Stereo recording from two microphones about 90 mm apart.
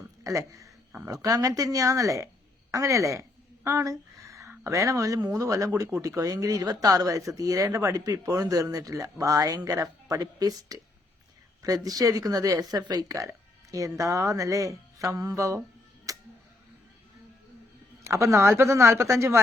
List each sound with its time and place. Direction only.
0.3 s a woman's voice: 35° right (ahead or behind)
16.1 s tick-tock: 40° right (ahead or behind)
18.0 s speech: 35° right (ahead or behind)